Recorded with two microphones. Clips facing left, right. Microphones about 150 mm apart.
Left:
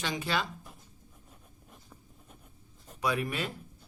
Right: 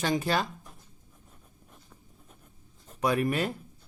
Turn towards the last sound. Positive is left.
turn(degrees=-45)  # may be behind; listen again after turning